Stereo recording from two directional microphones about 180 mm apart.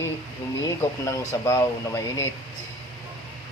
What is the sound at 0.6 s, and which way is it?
Speech, 15° left (ahead or behind).